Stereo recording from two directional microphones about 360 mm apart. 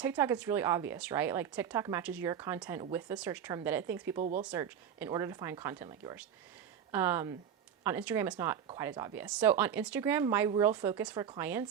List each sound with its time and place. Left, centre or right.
0.0 s speech: centre
4.2 s speech: right
4.4 s speech: centre